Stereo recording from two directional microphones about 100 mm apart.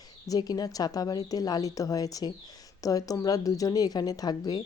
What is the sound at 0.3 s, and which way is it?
Speech, 40° left (ahead or behind).